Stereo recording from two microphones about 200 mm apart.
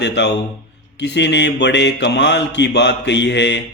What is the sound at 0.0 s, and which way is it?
Mantra, 60° left (ahead or behind).